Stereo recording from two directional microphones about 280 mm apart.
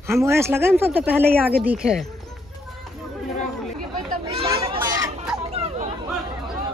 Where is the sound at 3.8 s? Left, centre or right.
Right.